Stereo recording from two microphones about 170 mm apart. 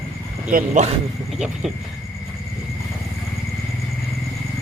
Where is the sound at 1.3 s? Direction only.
Centre (ahead or behind).